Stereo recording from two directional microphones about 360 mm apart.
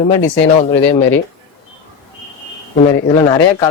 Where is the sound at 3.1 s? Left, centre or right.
Centre.